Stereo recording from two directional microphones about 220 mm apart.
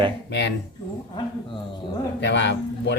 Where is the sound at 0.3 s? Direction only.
50° left (ahead or behind).